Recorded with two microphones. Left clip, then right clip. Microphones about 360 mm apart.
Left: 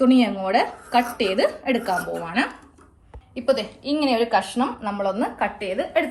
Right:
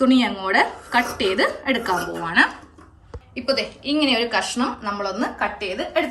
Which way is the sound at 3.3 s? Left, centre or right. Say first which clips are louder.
Left 1 dB; centre.